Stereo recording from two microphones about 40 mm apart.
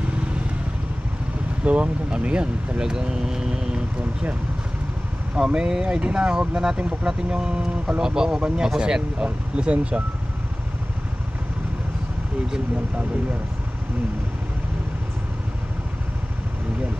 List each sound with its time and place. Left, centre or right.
1.6 s speech: right; by 3.8 s centre
5.3 s speech: right
9.6 s speech: right